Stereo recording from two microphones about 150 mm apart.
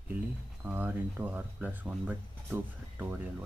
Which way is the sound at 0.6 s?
10° right (ahead or behind).